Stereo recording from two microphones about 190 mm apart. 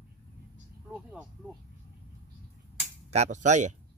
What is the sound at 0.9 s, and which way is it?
Speech, 5° right (ahead or behind).